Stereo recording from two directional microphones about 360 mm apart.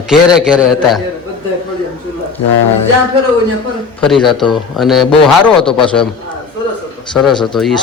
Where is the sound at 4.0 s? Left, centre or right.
Centre.